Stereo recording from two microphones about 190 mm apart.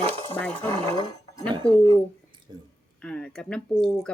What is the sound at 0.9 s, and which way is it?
Speech, 20° left (ahead or behind).